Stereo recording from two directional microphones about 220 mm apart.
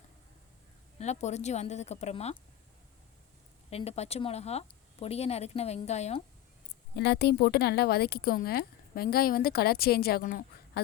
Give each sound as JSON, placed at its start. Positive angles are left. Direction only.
{"t": 0.9, "sound": "speech", "side_deg": 30}
{"t": 3.7, "sound": "a woman's voice", "side_deg": 30}
{"t": 6.9, "sound": "speech", "side_deg": 50}